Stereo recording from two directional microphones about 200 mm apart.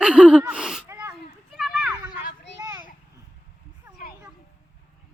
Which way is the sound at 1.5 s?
Centre (ahead or behind).